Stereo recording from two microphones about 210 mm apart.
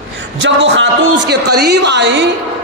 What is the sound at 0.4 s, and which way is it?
A woman's voice, 60° right (ahead or behind).